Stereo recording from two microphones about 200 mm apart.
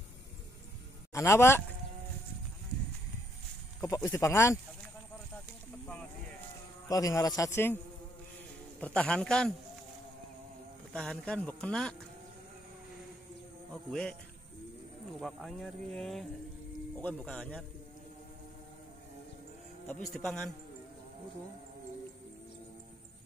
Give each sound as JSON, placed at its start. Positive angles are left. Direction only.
{"t": 1.1, "sound": "a man's voice", "side_deg": 15}
{"t": 3.8, "sound": "a man's voice", "side_deg": 15}
{"t": 6.9, "sound": "a man's voice", "side_deg": 15}
{"t": 10.9, "sound": "speech", "side_deg": 0}
{"t": 13.8, "sound": "speech", "side_deg": 5}
{"t": 15.1, "sound": "speech", "side_deg": 0}
{"t": 19.9, "sound": "speech", "side_deg": 5}